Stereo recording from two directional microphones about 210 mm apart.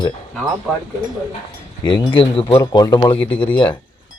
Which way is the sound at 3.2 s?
5° left (ahead or behind).